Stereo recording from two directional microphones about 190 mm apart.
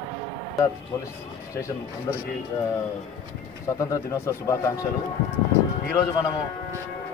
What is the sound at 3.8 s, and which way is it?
Speech, 15° left (ahead or behind).